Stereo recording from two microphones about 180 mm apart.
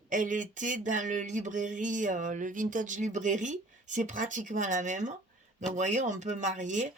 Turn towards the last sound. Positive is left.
turn(degrees=-45)  # may be behind; listen again after turning